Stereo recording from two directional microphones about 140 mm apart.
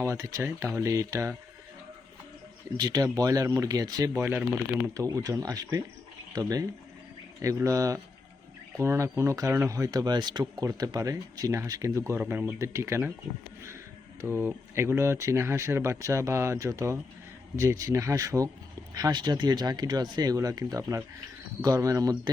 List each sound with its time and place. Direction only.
0.0 s speech: 20° right (ahead or behind)
2.7 s speech: 30° right (ahead or behind)
4.2 s speech: 15° right (ahead or behind)
4.9 s speech: 25° right (ahead or behind)
12.2 s speech: 10° right (ahead or behind)
12.5 s speech: 20° right (ahead or behind)
14.2 s speech: 15° right (ahead or behind)